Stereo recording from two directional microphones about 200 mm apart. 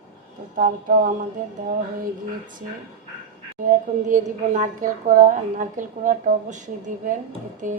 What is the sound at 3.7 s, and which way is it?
A woman's voice, 40° right (ahead or behind).